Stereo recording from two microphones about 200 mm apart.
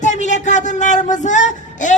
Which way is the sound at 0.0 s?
35° left (ahead or behind).